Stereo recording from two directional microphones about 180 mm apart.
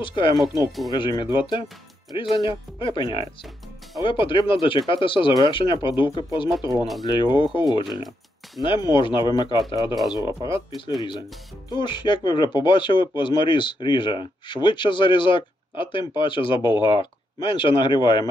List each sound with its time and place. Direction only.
0.0 s speech: 30° left (ahead or behind)
0.7 s speech: centre (ahead or behind)
0.9 s speech: 25° left (ahead or behind)
6.8 s speech: centre (ahead or behind)
7.1 s speech: 25° left (ahead or behind)